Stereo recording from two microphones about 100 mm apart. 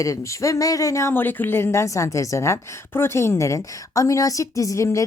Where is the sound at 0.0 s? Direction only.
30° left (ahead or behind).